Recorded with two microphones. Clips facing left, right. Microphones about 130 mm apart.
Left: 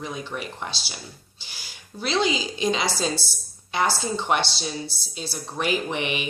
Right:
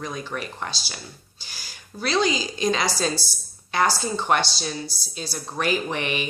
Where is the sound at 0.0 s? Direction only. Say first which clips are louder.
Right 1 dB; 10° left (ahead or behind).